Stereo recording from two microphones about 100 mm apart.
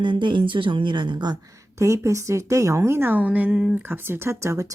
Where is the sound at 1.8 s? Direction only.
30° right (ahead or behind).